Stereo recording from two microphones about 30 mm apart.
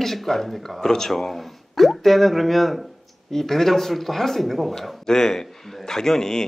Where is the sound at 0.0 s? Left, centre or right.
Centre.